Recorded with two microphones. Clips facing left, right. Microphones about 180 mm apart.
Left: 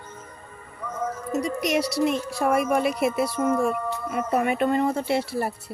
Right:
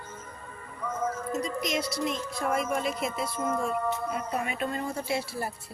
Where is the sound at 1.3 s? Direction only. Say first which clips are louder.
Left 10 dB; 70° left (ahead or behind).